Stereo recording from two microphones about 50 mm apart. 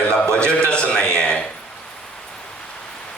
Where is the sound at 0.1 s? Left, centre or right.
Centre.